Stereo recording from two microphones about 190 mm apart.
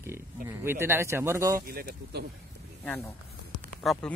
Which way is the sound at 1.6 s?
55° right (ahead or behind).